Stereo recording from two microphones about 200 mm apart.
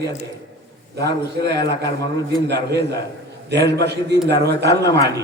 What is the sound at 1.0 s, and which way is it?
A man's voice, 55° right (ahead or behind).